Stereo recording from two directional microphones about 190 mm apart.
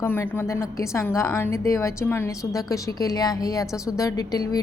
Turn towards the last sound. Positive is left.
turn(degrees=20)  # may be behind; listen again after turning